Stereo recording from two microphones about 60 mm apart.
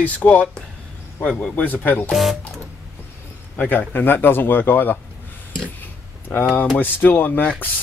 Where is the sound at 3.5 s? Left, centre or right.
Left.